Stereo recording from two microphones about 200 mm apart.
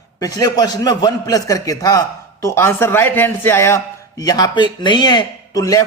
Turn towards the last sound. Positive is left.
turn(degrees=20)  # may be behind; listen again after turning